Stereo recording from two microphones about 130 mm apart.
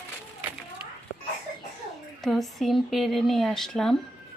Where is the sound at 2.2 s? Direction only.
Centre (ahead or behind).